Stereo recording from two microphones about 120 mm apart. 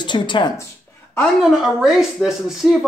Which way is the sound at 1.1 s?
5° right (ahead or behind).